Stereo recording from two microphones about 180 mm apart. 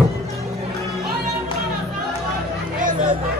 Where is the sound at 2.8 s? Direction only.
50° right (ahead or behind).